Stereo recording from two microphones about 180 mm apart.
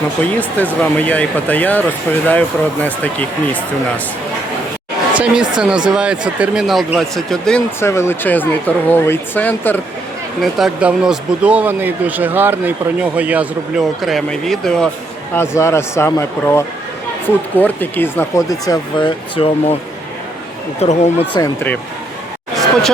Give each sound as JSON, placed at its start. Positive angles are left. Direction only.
{"t": 0.2, "sound": "speech", "side_deg": 10}
{"t": 2.8, "sound": "speech", "side_deg": 10}
{"t": 5.1, "sound": "speech", "side_deg": -5}
{"t": 10.4, "sound": "speech", "side_deg": -5}
{"t": 15.4, "sound": "speech", "side_deg": 15}
{"t": 20.7, "sound": "speech", "side_deg": 40}
{"t": 21.3, "sound": "speech", "side_deg": 15}